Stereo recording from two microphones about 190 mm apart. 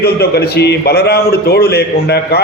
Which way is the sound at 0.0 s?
55° left (ahead or behind).